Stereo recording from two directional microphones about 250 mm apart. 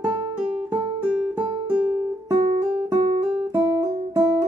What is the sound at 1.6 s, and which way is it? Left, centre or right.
Music, centre.